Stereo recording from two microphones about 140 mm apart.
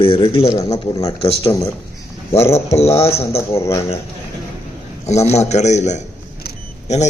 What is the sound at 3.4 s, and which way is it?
Speech, 20° left (ahead or behind).